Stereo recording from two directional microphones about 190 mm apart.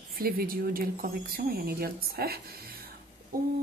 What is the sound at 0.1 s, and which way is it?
Speech, 50° right (ahead or behind).